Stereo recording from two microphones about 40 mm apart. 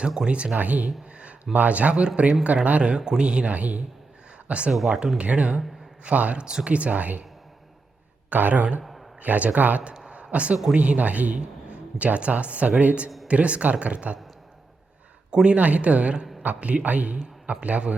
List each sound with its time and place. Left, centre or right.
0.3 s a man's voice: right
0.5 s a man's voice: right
0.9 s a sound: right
1.5 s a man's voice: right
2.9 s a man's voice: centre
3.2 s a man's voice: right
6.4 s a man's voice: right
6.7 s a man's voice: right
8.3 s speech: right
8.8 s a sound: centre
9.2 s a man's voice: right
10.3 s a man's voice: right
15.4 s a man's voice: right